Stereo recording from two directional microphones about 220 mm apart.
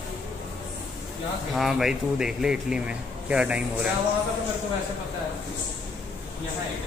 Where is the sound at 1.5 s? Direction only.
Centre (ahead or behind).